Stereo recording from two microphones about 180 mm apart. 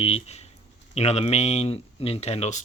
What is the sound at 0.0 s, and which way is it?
Speech, 35° left (ahead or behind).